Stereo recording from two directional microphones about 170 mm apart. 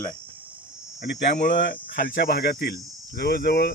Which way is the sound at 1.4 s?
90° left.